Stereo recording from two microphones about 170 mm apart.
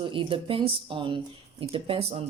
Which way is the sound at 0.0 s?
30° right (ahead or behind).